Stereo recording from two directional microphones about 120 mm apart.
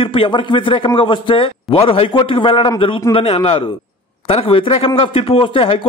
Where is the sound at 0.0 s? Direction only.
45° left (ahead or behind).